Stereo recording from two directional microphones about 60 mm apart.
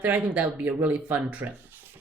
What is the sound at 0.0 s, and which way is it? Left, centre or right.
A woman's voice, right.